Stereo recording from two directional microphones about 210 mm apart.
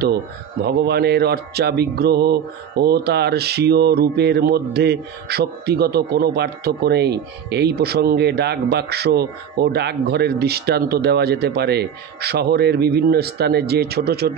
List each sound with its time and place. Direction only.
0.7 s speech: 50° right (ahead or behind)